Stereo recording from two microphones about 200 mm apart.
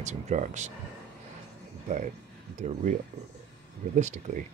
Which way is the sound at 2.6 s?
40° right (ahead or behind).